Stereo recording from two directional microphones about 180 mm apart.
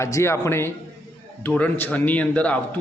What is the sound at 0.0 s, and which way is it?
A man's voice, 15° left (ahead or behind).